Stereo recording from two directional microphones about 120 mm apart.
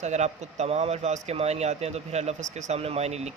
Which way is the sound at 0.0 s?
75° right (ahead or behind).